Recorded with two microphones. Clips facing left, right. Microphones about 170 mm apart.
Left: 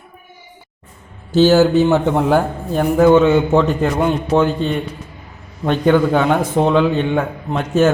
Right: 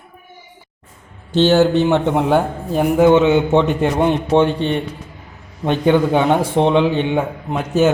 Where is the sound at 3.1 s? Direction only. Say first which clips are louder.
Left 3 dB; 15° right (ahead or behind).